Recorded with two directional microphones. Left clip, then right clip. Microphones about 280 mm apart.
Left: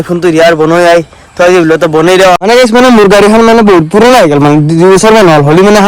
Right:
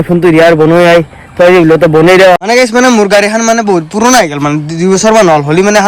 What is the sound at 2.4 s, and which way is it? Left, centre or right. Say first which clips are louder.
Speech: left 3 dB; centre.